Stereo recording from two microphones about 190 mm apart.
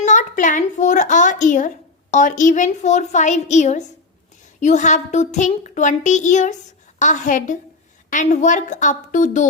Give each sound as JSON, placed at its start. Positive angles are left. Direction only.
{"t": 0.0, "sound": "speech", "side_deg": 40}